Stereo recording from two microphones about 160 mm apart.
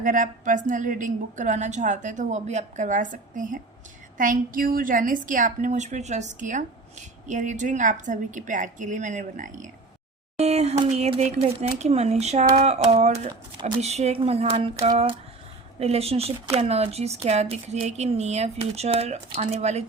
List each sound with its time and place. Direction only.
0.0 s a woman's voice: 55° right (ahead or behind)